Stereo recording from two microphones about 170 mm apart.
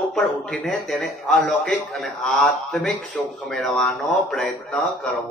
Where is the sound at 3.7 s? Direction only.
5° left (ahead or behind).